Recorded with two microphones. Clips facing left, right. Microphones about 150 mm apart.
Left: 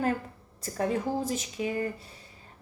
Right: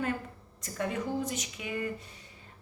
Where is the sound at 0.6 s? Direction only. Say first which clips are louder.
Left 4 dB; 35° left (ahead or behind).